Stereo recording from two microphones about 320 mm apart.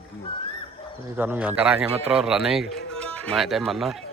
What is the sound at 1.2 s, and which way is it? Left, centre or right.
A man's voice, centre.